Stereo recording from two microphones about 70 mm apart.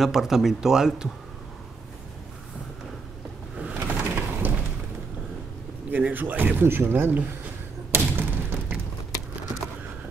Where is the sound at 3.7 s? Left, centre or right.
Right.